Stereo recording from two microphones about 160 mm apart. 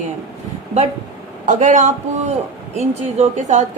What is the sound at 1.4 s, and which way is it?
A woman's voice, 50° right (ahead or behind).